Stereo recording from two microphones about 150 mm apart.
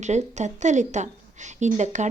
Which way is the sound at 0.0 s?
50° right (ahead or behind).